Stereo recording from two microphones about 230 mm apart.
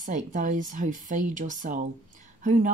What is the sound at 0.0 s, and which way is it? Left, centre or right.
Speech, right.